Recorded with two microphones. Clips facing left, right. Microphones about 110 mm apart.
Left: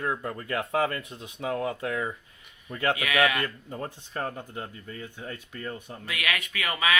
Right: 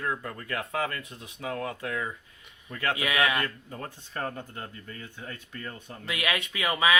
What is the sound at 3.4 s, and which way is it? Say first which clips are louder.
Speech: left 2 dB; 25° left (ahead or behind).